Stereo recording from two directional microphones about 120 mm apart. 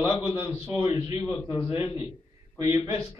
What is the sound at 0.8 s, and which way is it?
Speech, 50° left (ahead or behind).